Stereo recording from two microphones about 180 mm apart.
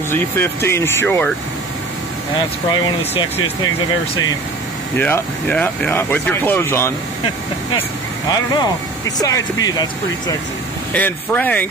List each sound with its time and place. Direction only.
0.1 s speech: 15° left (ahead or behind)
2.7 s speech: 25° left (ahead or behind)
4.9 s speech: 10° left (ahead or behind)
8.3 s speech: 20° left (ahead or behind)
10.9 s speech: 10° left (ahead or behind)